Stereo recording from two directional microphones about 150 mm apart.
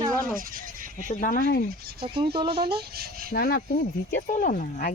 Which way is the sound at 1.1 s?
65° left (ahead or behind).